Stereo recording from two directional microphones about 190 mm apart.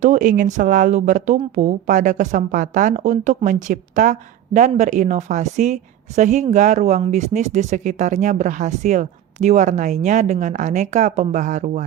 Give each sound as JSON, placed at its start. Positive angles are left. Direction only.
{"t": 0.0, "sound": "a woman's voice", "side_deg": -40}